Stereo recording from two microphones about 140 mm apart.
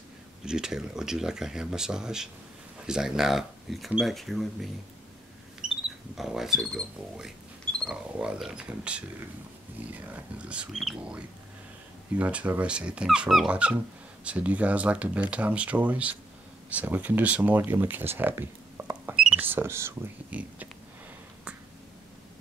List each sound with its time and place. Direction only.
0.5 s speech: 5° right (ahead or behind)
5.6 s pig: 50° left (ahead or behind)
6.1 s speech: 5° right (ahead or behind)